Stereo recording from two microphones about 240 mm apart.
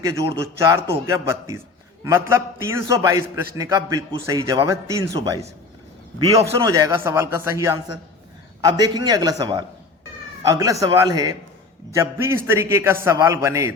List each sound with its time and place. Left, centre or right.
0.0 s a man's voice: centre